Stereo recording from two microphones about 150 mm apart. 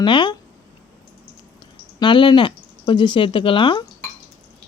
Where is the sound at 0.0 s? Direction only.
30° left (ahead or behind).